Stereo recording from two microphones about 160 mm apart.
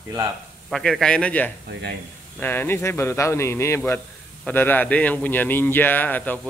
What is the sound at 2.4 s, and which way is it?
A man's voice, 15° left (ahead or behind).